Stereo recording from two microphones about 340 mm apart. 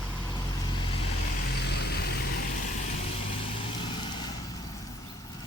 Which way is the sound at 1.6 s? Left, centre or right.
Left.